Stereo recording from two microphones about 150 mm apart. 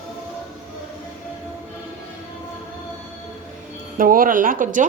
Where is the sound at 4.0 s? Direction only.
65° right (ahead or behind).